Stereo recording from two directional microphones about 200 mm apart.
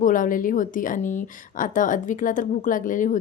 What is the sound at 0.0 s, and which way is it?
Speech, 40° left (ahead or behind).